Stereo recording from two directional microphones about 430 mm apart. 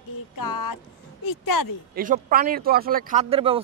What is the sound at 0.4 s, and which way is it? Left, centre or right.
Speech, left.